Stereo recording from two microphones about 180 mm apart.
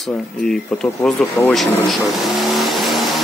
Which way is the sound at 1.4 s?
10° left (ahead or behind).